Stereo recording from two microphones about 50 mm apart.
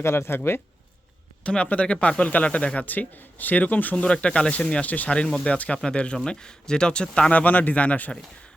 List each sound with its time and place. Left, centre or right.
0.0 s speech: left
1.5 s speech: left
3.9 s speech: centre